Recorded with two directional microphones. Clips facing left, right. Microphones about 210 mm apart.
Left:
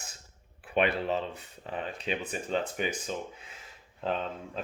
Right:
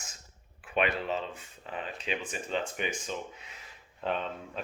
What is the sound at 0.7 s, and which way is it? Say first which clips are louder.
Speech: left 2 dB; 35° left (ahead or behind).